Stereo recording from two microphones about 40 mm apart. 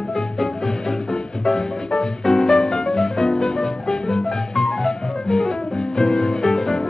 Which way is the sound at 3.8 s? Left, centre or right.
Centre.